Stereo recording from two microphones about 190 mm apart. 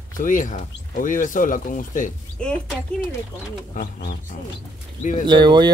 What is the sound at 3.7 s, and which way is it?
Speech, 50° left (ahead or behind).